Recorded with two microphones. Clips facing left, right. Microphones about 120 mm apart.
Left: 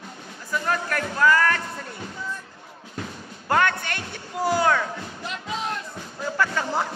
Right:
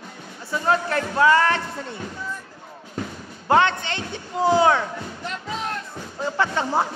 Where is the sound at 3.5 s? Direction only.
20° right (ahead or behind).